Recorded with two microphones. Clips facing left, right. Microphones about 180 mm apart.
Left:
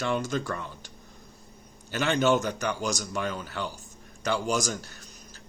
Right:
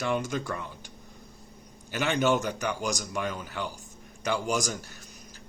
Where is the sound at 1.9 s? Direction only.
10° right (ahead or behind).